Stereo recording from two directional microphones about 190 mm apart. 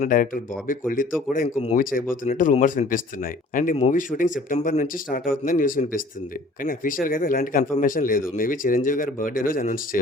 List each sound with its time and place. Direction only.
0.0 s speech: 45° left (ahead or behind)